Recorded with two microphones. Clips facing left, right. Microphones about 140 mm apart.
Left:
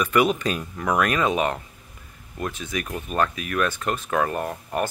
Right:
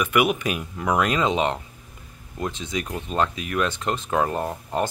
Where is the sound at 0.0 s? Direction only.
10° right (ahead or behind).